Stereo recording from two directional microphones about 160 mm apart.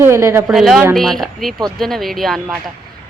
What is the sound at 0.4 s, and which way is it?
Speech, centre (ahead or behind).